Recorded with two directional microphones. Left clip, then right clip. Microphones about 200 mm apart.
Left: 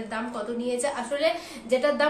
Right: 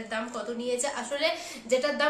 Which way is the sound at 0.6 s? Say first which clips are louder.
Left 3 dB; 15° right (ahead or behind).